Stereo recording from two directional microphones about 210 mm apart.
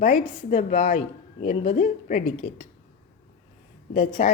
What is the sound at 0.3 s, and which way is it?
A woman's voice, 35° left (ahead or behind).